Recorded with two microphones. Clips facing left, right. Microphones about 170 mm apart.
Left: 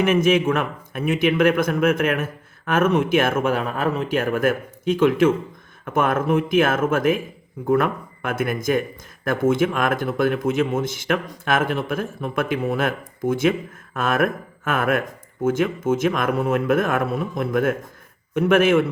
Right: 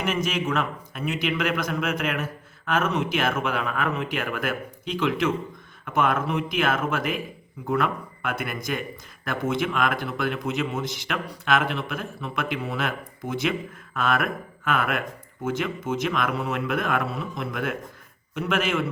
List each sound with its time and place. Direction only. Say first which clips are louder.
0.0 s speech: left 9 dB; 55° left (ahead or behind)